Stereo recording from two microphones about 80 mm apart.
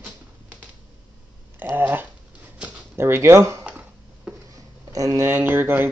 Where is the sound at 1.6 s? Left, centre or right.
Right.